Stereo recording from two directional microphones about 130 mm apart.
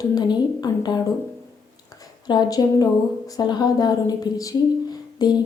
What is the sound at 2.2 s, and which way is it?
Speech, 30° left (ahead or behind).